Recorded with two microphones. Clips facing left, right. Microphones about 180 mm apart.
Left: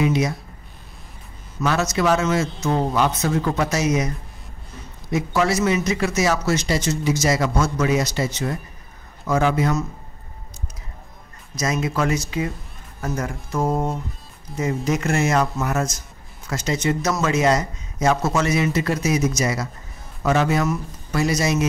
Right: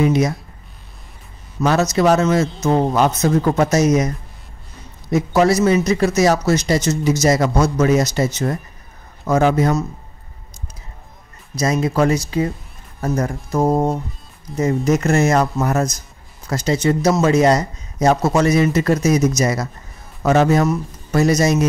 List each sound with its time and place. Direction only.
0.0 s speech: 45° right (ahead or behind)
1.6 s speech: 40° right (ahead or behind)
5.1 s speech: 40° right (ahead or behind)
11.5 s speech: 35° right (ahead or behind)